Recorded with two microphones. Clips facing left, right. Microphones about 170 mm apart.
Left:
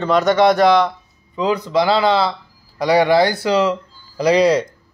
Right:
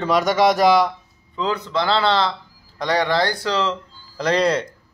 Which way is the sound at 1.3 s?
15° left (ahead or behind).